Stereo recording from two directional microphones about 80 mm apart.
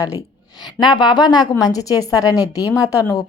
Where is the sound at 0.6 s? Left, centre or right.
Left.